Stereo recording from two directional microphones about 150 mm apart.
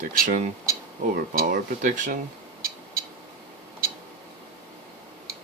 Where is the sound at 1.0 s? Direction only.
70° right (ahead or behind).